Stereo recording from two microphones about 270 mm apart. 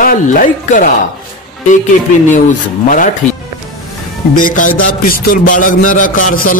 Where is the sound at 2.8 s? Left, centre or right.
Left.